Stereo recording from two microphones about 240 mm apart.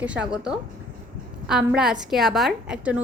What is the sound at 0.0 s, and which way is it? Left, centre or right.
Speech, centre.